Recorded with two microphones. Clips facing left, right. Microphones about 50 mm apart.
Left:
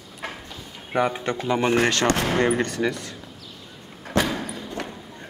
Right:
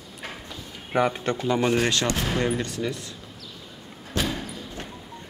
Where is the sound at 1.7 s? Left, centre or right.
Left.